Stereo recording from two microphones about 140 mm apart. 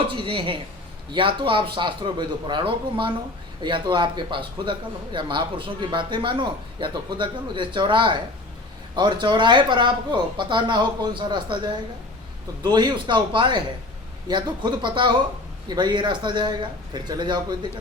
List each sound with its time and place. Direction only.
0.2 s a man's voice: 40° right (ahead or behind)
12.6 s a man's voice: 30° right (ahead or behind)